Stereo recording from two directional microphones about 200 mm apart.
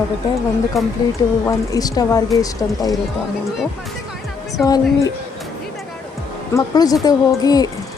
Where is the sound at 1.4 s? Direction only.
20° left (ahead or behind).